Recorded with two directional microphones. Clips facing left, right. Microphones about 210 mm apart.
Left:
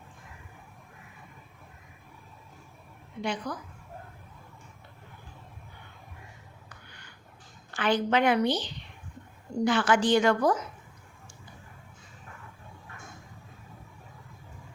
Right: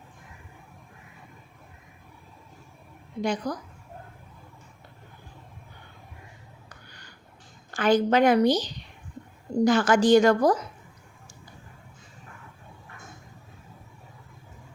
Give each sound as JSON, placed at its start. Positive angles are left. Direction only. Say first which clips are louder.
{"t": 3.2, "sound": "a woman's voice", "louder": "right 5 dB", "side_deg": -40}
{"t": 7.7, "sound": "a woman's voice", "louder": "right 5 dB", "side_deg": -45}